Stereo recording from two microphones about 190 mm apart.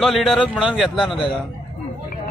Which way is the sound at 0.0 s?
Centre (ahead or behind).